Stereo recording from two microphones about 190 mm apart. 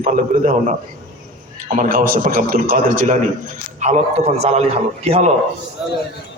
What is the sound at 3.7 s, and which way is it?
A man's voice, 35° right (ahead or behind).